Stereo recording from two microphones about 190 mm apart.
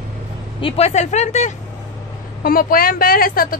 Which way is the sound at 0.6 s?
35° left (ahead or behind).